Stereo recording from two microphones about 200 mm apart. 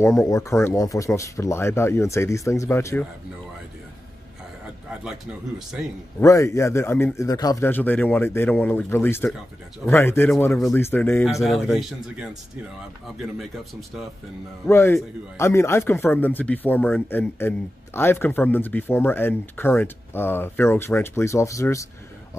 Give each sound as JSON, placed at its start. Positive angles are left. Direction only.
{"t": 0.0, "sound": "speech", "side_deg": 15}
{"t": 6.1, "sound": "speech", "side_deg": 15}
{"t": 11.4, "sound": "speech", "side_deg": 0}
{"t": 14.7, "sound": "speech", "side_deg": 10}